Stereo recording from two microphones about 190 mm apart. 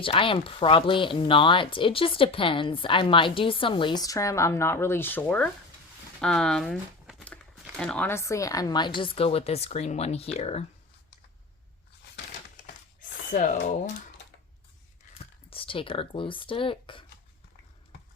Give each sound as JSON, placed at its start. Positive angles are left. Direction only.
{"t": 0.0, "sound": "speech", "side_deg": 25}
{"t": 13.0, "sound": "a sound", "side_deg": 45}
{"t": 15.4, "sound": "speech", "side_deg": 30}